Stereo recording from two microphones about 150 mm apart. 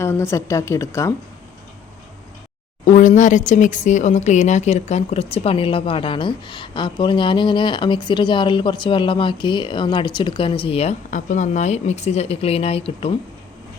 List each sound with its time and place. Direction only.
0.0 s speech: 20° left (ahead or behind)
2.8 s speech: 55° left (ahead or behind)
11.1 s speech: 55° left (ahead or behind); by 13.1 s 40° left (ahead or behind)